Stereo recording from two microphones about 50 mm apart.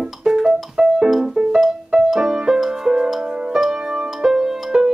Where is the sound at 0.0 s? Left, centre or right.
Centre.